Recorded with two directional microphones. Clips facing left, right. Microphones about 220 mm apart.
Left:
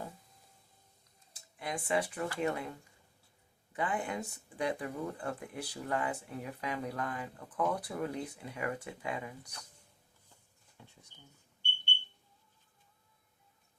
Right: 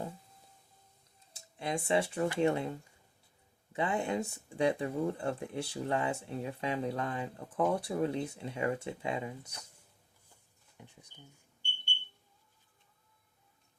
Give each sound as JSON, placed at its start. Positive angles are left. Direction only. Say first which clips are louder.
{"t": 1.3, "sound": "speech", "louder": "right 4 dB", "side_deg": -25}
{"t": 10.8, "sound": "speech", "louder": "right 3 dB", "side_deg": -15}